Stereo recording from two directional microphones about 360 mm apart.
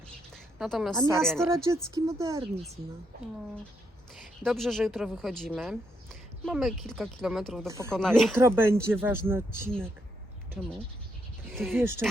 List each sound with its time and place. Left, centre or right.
0.6 s speech: centre
4.1 s a woman's voice: centre